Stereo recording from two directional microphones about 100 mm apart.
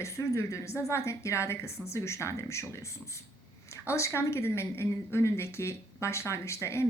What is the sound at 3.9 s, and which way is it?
A woman's voice, 30° left (ahead or behind).